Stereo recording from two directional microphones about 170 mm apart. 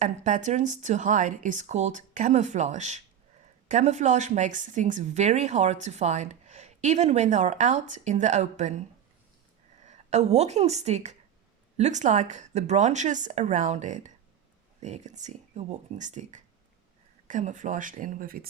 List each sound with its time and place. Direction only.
0.0 s a woman's voice: 45° right (ahead or behind)
9.8 s a woman's voice: 45° right (ahead or behind)